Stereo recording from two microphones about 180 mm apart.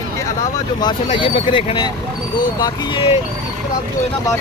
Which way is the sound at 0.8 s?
25° left (ahead or behind).